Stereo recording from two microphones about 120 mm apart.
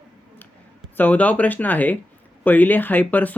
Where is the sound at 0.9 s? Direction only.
15° left (ahead or behind).